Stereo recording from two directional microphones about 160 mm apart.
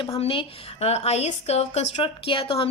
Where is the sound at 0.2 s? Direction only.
35° left (ahead or behind).